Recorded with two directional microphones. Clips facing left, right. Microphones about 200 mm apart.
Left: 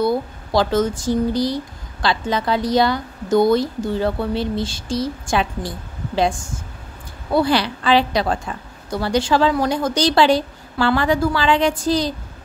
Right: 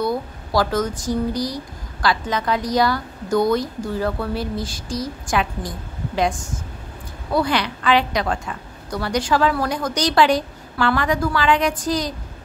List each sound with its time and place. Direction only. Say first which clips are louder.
0.0 s speech: left 3 dB; 25° left (ahead or behind)
7.3 s speech: left 3 dB; 30° left (ahead or behind)